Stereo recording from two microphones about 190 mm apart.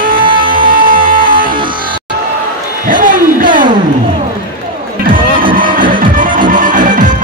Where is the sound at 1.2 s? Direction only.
45° right (ahead or behind).